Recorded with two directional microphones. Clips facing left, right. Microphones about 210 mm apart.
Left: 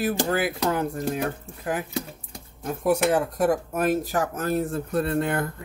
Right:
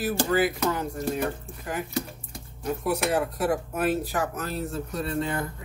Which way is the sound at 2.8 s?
50° left (ahead or behind).